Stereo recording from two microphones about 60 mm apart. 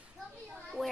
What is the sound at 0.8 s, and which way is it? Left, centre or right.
Speech, centre.